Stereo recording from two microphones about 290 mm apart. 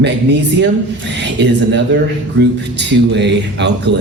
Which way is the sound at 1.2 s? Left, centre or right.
Right.